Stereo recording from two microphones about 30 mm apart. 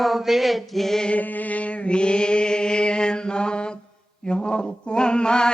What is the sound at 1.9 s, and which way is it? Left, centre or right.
Mantra, left.